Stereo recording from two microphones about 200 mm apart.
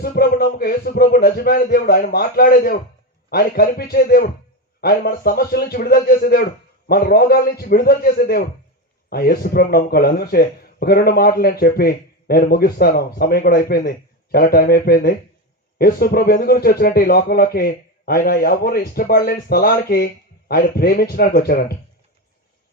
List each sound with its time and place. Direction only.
0.0 s speech: 50° left (ahead or behind)